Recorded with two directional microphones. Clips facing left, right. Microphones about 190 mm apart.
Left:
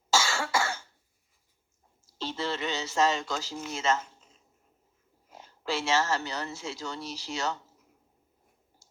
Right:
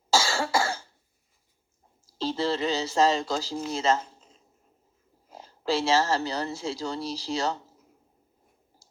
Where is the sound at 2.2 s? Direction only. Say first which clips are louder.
Right 6 dB; 35° right (ahead or behind).